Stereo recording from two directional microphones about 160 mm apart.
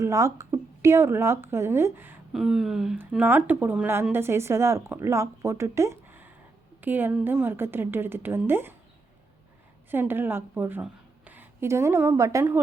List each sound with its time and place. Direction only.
0.0 s speech: 20° right (ahead or behind)
2.3 s speech: centre (ahead or behind)
9.9 s a woman's voice: 15° right (ahead or behind)